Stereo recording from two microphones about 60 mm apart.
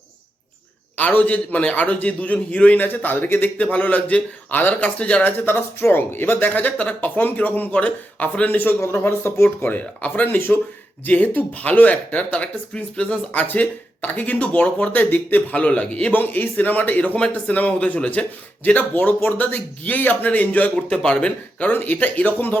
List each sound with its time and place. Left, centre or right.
0.9 s speech: left
5.5 s speech: left
9.7 s speech: left
16.1 s speech: left